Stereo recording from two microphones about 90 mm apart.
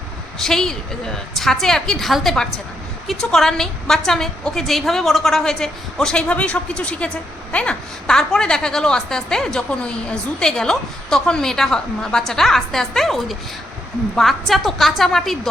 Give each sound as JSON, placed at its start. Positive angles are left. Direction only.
{"t": 0.3, "sound": "a woman's voice", "side_deg": 5}